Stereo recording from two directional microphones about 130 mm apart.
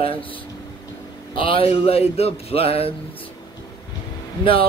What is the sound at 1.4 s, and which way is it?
Speech, 45° left (ahead or behind).